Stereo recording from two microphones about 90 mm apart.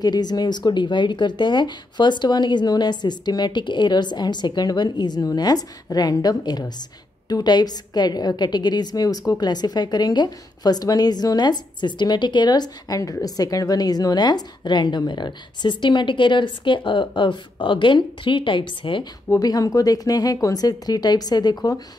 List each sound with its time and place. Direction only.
0.0 s a woman's voice: 50° left (ahead or behind); by 19.0 s 70° left (ahead or behind)
19.2 s a woman's voice: 40° left (ahead or behind)